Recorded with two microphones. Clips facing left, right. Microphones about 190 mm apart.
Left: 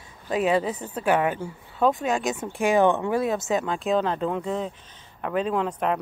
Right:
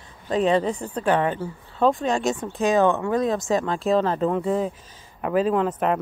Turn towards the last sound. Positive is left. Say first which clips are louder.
# right 3 dB
turn(degrees=0)  # may be behind; listen again after turning